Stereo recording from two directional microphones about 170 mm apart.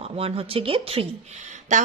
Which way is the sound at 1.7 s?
45° right (ahead or behind).